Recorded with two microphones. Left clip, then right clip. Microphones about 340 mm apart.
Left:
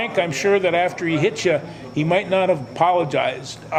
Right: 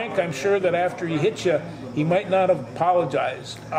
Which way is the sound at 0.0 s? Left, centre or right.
Left.